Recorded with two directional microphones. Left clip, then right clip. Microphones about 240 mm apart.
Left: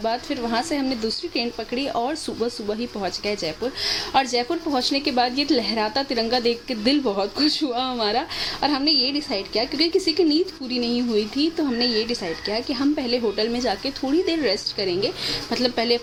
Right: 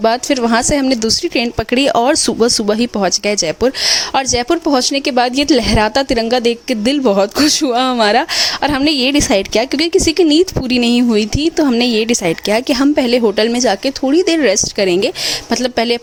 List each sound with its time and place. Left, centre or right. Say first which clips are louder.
0.0 s speech: right 11 dB; right